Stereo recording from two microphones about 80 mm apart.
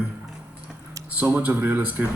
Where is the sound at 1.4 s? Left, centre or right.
Centre.